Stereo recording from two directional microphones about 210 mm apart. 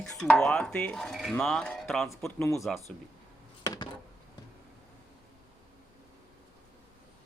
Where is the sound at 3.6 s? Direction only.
20° left (ahead or behind).